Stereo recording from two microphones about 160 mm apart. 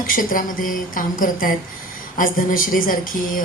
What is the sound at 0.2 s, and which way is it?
Speech, 60° left (ahead or behind).